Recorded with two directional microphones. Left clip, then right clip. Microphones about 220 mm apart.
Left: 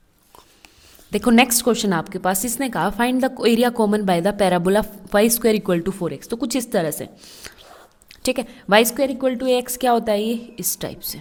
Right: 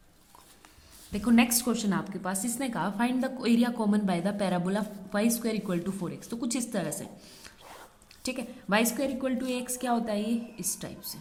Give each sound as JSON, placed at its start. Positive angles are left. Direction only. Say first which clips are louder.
{"t": 1.1, "sound": "a woman's voice", "louder": "left 10 dB", "side_deg": 45}